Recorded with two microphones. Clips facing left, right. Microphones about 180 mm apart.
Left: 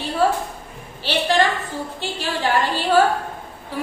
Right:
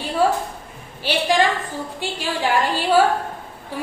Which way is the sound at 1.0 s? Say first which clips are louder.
Even; 10° right (ahead or behind).